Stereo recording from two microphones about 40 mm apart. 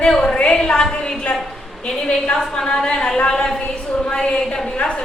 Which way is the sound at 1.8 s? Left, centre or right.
Left.